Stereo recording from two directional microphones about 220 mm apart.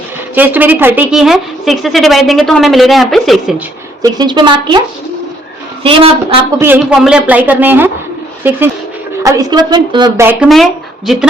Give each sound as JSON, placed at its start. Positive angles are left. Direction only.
{"t": 0.3, "sound": "a woman's voice", "side_deg": -10}
{"t": 4.0, "sound": "a woman's voice", "side_deg": -20}
{"t": 5.8, "sound": "a woman's voice", "side_deg": -25}
{"t": 6.6, "sound": "a woman's voice", "side_deg": -5}
{"t": 10.5, "sound": "a woman's voice", "side_deg": 0}